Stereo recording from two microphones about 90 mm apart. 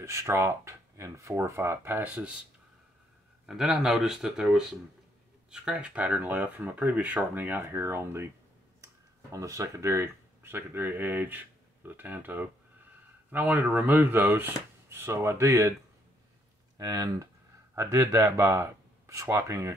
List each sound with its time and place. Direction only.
0.0 s speech: 30° right (ahead or behind); by 2.4 s 15° right (ahead or behind)
3.4 s speech: 5° right (ahead or behind); by 15.7 s 35° right (ahead or behind)
16.7 s speech: 45° right (ahead or behind)
17.7 s speech: 35° right (ahead or behind)